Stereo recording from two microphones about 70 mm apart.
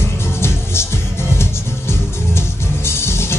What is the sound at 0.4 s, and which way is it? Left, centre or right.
Music, left.